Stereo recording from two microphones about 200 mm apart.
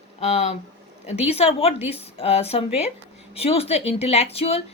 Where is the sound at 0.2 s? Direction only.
35° left (ahead or behind).